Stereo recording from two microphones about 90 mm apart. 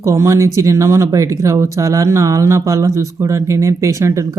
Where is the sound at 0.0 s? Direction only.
35° right (ahead or behind).